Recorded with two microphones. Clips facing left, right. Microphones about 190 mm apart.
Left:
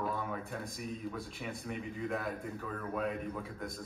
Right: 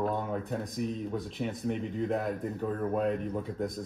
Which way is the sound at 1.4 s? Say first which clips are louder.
Right 8 dB; 45° right (ahead or behind).